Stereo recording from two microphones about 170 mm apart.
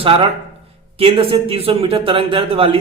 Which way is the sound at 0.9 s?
35° right (ahead or behind).